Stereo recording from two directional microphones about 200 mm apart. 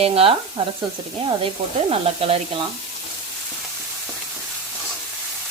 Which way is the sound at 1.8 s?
30° right (ahead or behind).